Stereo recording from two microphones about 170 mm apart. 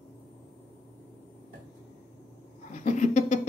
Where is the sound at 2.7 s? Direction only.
50° left (ahead or behind).